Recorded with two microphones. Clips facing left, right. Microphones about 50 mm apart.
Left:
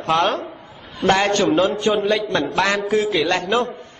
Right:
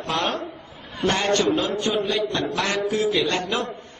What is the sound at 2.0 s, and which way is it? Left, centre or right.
Speech, left.